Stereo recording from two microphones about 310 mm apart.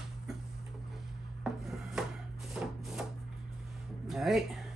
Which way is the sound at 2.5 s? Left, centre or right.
Centre.